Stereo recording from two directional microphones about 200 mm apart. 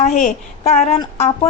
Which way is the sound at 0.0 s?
40° left (ahead or behind).